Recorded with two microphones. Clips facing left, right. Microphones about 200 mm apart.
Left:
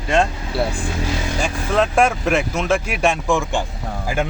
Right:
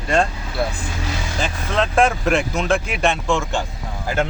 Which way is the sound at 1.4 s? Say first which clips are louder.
Left 2 dB; 10° left (ahead or behind).